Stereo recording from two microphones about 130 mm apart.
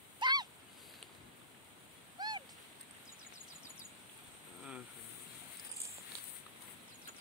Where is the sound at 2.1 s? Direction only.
35° right (ahead or behind).